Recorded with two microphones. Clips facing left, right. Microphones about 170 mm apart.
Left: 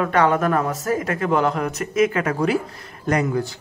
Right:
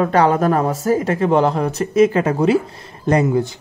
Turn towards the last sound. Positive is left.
turn(degrees=-25)  # may be behind; listen again after turning